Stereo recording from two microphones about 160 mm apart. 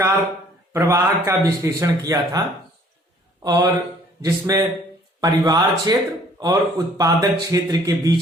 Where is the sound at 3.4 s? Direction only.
25° right (ahead or behind).